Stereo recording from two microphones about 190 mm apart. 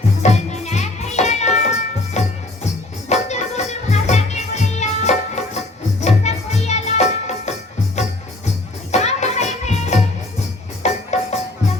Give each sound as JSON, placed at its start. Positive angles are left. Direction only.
{"t": 0.2, "sound": "music", "side_deg": 35}